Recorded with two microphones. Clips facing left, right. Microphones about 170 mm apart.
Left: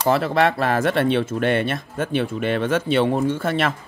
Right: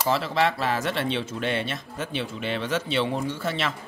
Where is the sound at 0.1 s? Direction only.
55° left (ahead or behind).